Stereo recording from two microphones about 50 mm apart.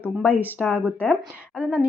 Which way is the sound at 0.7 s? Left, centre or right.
Right.